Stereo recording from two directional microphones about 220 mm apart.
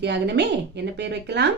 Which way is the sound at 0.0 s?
50° right (ahead or behind).